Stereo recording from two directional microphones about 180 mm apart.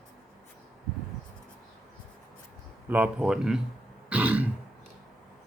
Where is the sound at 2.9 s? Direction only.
5° right (ahead or behind).